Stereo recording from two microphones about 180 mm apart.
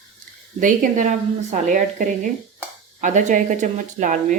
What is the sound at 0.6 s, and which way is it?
Speech, 45° right (ahead or behind).